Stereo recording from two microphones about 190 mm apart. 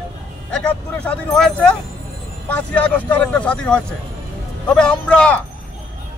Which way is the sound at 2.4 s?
5° left (ahead or behind).